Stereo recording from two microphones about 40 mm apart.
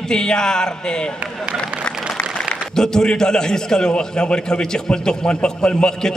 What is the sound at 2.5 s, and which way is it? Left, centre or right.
A man's voice, centre.